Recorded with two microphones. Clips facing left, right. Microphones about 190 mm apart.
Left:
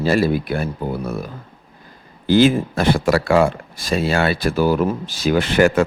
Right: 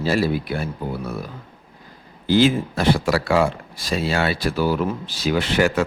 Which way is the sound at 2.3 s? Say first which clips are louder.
Left 3 dB; 50° left (ahead or behind).